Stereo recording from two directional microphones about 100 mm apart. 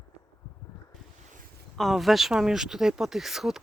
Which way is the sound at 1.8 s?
Centre (ahead or behind).